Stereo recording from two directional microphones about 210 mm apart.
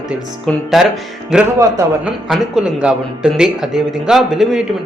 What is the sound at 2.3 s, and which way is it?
A man's voice, centre (ahead or behind).